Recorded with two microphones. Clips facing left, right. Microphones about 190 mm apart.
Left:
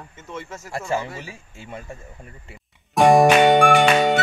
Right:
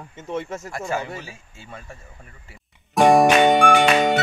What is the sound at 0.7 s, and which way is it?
A man's voice, 25° left (ahead or behind).